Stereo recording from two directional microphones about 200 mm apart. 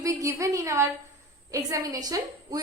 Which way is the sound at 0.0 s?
15° right (ahead or behind).